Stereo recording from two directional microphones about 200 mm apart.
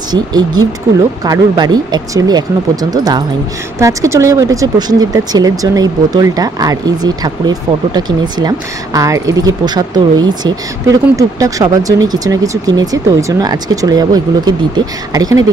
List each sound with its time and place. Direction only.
0.1 s speech: 20° right (ahead or behind)